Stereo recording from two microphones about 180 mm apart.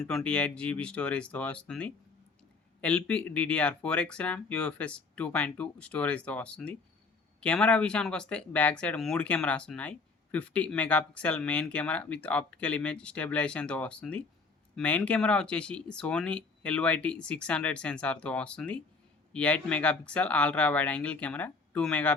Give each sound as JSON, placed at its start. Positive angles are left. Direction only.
{"t": 0.0, "sound": "speech", "side_deg": 0}